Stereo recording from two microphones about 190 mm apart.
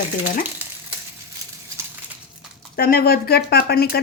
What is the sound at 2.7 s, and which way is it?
Speech, 50° left (ahead or behind).